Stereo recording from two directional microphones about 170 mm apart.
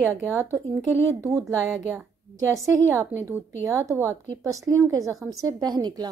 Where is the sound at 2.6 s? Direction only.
20° right (ahead or behind).